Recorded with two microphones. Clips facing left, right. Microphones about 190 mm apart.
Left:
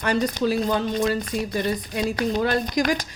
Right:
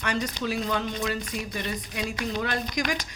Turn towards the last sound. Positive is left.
turn(degrees=35)  # may be behind; listen again after turning